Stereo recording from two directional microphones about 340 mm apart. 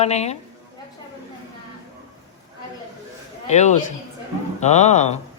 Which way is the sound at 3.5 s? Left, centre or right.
Centre.